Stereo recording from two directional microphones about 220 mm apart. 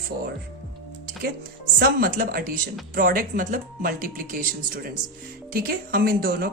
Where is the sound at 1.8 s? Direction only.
40° right (ahead or behind).